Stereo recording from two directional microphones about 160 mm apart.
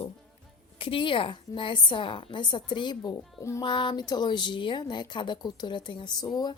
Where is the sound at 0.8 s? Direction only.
35° left (ahead or behind).